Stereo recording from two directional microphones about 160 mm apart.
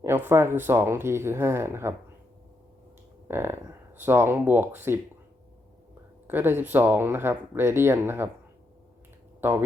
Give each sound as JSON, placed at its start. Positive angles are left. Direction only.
{"t": 0.0, "sound": "speech", "side_deg": -15}
{"t": 3.2, "sound": "speech", "side_deg": -15}
{"t": 6.2, "sound": "speech", "side_deg": -15}
{"t": 9.4, "sound": "speech", "side_deg": -15}